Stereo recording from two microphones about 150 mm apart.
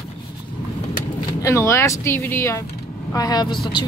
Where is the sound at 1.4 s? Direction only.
20° left (ahead or behind).